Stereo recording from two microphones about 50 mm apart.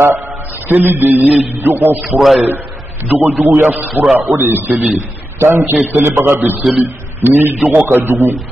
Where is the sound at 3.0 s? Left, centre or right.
Right.